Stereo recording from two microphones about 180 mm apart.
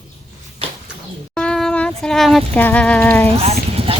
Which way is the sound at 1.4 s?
5° left (ahead or behind).